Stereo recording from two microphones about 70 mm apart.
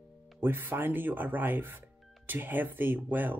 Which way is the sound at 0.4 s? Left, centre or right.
Right.